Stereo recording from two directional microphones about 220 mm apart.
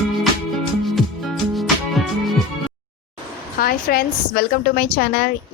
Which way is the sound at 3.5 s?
40° left (ahead or behind).